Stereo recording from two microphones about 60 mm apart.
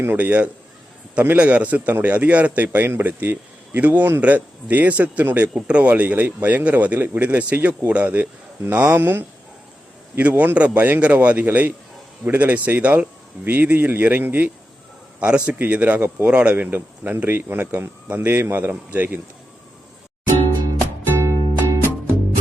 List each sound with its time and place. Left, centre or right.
0.2 s a man's voice: right
11.0 s a man's voice: right
15.2 s a man's voice: centre; by 18.7 s right
18.7 s speech: right
21.2 s music: right